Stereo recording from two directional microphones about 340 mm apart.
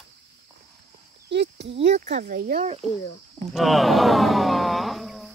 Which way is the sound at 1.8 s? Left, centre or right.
Right.